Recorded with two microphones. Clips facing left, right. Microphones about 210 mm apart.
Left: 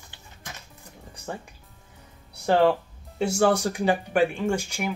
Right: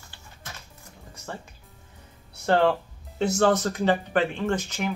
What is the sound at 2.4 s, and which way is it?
Speech, 10° left (ahead or behind).